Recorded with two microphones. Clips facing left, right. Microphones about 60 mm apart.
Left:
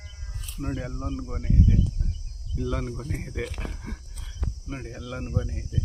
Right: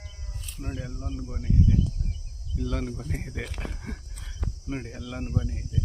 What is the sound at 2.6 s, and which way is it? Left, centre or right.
Speech, centre.